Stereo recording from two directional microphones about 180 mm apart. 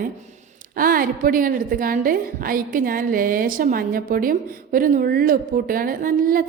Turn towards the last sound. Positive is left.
turn(degrees=-50)  # may be behind; listen again after turning